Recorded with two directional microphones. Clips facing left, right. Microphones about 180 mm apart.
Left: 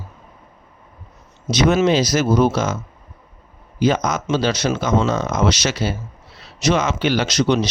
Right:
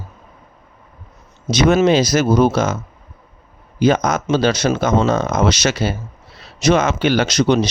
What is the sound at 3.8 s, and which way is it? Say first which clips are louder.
Speech: right 3 dB; 50° right (ahead or behind).